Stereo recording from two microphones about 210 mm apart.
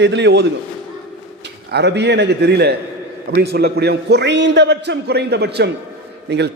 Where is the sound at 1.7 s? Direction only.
55° right (ahead or behind).